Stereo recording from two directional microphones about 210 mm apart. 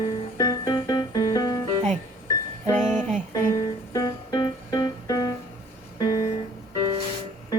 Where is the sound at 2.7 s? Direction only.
10° left (ahead or behind).